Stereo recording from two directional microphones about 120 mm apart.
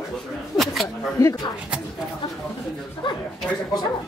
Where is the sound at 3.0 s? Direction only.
45° left (ahead or behind).